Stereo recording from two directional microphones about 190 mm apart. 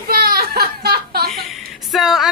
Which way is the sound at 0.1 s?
55° right (ahead or behind).